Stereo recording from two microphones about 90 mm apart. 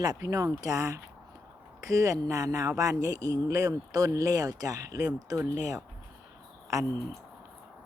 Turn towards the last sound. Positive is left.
turn(degrees=-35)  # may be behind; listen again after turning